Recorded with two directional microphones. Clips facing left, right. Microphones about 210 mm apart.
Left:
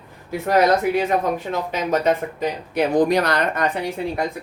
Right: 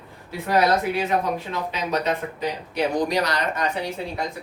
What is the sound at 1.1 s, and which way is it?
Speech, 50° left (ahead or behind).